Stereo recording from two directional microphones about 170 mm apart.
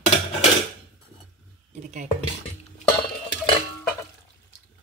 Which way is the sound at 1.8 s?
45° right (ahead or behind).